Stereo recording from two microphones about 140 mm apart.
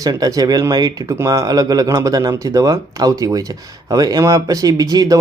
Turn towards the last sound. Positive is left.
turn(degrees=-25)  # may be behind; listen again after turning